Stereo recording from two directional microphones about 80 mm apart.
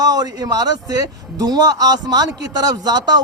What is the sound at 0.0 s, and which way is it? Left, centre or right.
Speech, right.